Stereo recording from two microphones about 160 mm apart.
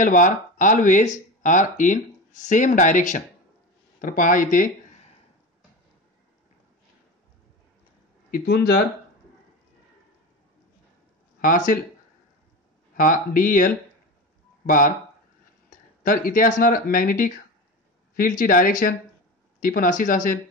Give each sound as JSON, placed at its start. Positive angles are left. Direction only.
{"t": 0.0, "sound": "speech", "side_deg": 55}
{"t": 8.3, "sound": "speech", "side_deg": 80}
{"t": 11.4, "sound": "speech", "side_deg": 60}
{"t": 12.9, "sound": "speech", "side_deg": 55}
{"t": 15.7, "sound": "speech", "side_deg": 55}